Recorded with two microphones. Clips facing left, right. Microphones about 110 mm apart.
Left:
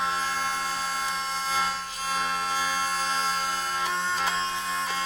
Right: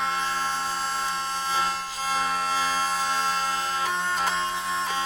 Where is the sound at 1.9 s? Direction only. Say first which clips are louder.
Right 2 dB; 35° right (ahead or behind).